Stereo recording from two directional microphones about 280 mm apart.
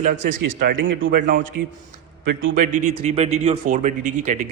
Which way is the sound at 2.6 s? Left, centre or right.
Right.